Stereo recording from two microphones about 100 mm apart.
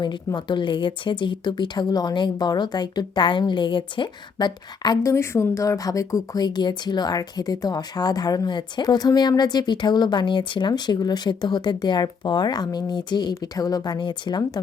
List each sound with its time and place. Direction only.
0.3 s speech: 50° left (ahead or behind)
5.0 s speech: 30° left (ahead or behind); by 14.6 s 45° left (ahead or behind)